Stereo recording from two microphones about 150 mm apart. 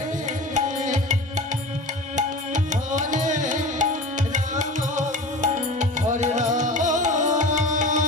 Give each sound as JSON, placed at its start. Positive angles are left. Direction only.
{"t": 0.5, "sound": "music", "side_deg": -55}
{"t": 2.1, "sound": "music", "side_deg": -55}